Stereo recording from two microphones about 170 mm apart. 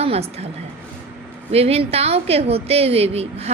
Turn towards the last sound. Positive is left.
turn(degrees=-35)  # may be behind; listen again after turning